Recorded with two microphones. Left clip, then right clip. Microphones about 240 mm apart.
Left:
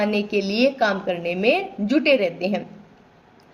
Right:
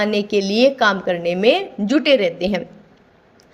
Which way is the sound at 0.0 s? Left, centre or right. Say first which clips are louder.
Right 4 dB; right.